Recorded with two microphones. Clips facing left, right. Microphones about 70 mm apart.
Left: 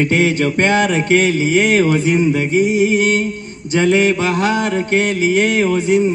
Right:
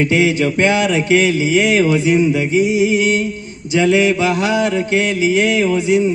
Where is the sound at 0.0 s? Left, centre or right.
Left.